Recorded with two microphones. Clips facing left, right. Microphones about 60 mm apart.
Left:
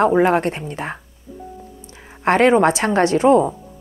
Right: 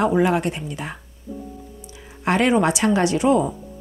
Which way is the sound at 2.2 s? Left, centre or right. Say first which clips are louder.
Left 4 dB; left.